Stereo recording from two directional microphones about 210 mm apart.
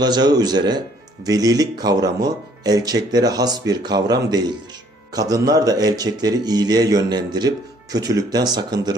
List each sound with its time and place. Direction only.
0.0 s a man's voice: 20° right (ahead or behind)